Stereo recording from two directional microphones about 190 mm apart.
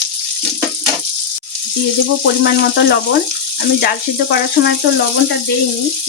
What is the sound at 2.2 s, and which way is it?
Speech, 60° left (ahead or behind).